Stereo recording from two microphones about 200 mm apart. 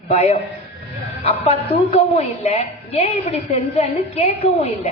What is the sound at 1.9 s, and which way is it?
A woman's voice, 30° left (ahead or behind).